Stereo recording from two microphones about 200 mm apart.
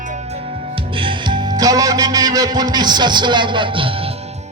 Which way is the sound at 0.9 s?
25° right (ahead or behind).